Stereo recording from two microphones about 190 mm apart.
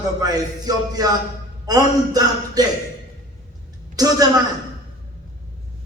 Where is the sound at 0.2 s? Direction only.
20° right (ahead or behind).